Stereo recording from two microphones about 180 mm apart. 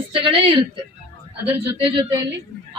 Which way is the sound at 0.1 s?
30° right (ahead or behind).